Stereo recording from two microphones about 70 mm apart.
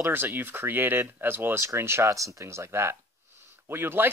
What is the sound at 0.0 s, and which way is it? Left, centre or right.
Speech, right.